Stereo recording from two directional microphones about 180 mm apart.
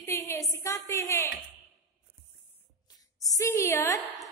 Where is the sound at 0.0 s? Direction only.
15° left (ahead or behind).